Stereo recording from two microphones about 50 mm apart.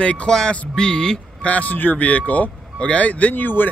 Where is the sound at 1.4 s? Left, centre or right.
Left.